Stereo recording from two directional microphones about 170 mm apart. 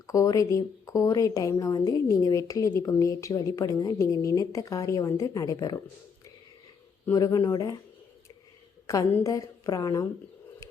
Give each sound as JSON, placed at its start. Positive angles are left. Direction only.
{"t": 0.1, "sound": "speech", "side_deg": 20}
{"t": 7.0, "sound": "speech", "side_deg": 20}
{"t": 8.9, "sound": "speech", "side_deg": 20}